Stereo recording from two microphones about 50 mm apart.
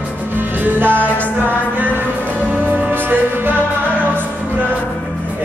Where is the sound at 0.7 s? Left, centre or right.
Right.